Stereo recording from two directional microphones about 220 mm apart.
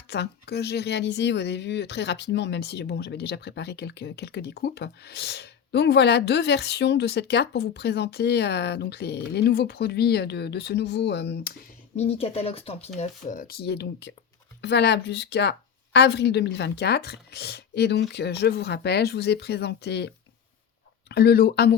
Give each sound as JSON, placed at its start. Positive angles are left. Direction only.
{"t": 0.1, "sound": "speech", "side_deg": 50}
{"t": 11.9, "sound": "speech", "side_deg": 25}